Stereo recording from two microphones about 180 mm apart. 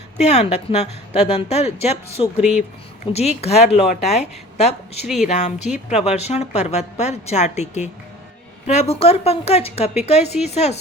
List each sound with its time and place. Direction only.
0.2 s a woman's voice: 40° left (ahead or behind)
2.4 s speech: 5° right (ahead or behind)
3.1 s a woman's voice: 35° left (ahead or behind)